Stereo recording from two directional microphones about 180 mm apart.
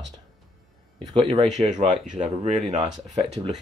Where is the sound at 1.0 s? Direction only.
25° right (ahead or behind).